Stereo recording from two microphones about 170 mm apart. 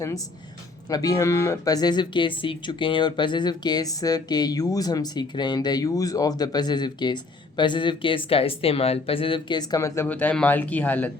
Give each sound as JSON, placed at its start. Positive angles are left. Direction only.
{"t": 0.9, "sound": "speech", "side_deg": 20}